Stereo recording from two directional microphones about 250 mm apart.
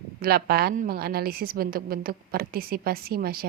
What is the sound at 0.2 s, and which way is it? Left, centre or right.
A woman's voice, right.